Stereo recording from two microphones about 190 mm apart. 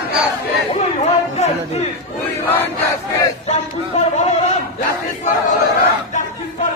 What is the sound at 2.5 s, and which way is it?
Battle cry, 10° left (ahead or behind).